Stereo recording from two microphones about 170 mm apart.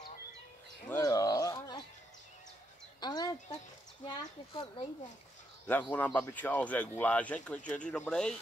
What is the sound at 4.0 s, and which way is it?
Speech, 25° left (ahead or behind).